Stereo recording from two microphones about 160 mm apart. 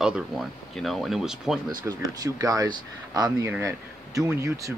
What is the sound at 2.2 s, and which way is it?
A man's voice, 20° right (ahead or behind).